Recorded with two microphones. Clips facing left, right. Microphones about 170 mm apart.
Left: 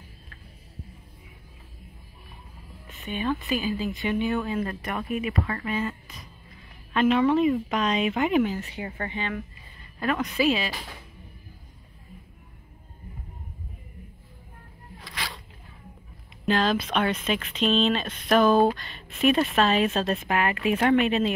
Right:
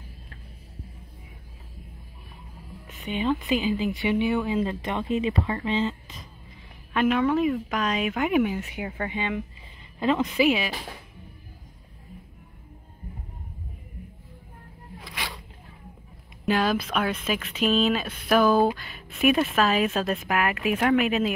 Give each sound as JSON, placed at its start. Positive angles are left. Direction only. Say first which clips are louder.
{"t": 3.1, "sound": "speech", "louder": "right 3 dB", "side_deg": -20}
{"t": 6.9, "sound": "speech", "louder": "left 1 dB", "side_deg": -10}
{"t": 15.0, "sound": "a sound", "louder": "right 1 dB", "side_deg": -15}
{"t": 16.4, "sound": "speech", "louder": "even", "side_deg": -10}